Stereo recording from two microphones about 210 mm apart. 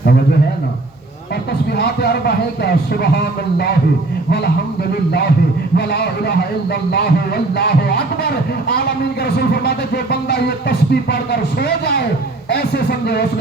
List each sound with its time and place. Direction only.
1.7 s speech: 50° left (ahead or behind)
5.7 s speech: 50° left (ahead or behind)